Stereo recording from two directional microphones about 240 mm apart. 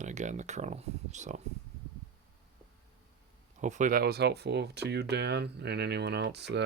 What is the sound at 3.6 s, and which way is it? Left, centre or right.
Speech, right.